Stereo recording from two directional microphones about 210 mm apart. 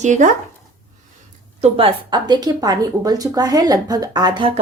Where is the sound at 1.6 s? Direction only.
25° right (ahead or behind).